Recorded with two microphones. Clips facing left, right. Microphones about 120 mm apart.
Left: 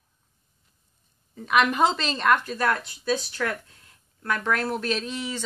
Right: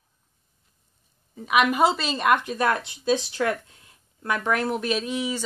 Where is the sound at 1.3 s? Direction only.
5° right (ahead or behind).